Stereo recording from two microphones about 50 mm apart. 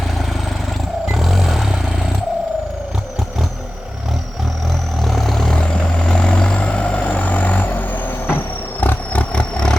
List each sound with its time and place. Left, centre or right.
1.0 s vehicle: centre
5.0 s vehicle: centre
5.5 s vehicle: centre; by 8.4 s left
8.8 s roar: left
9.3 s vehicle: centre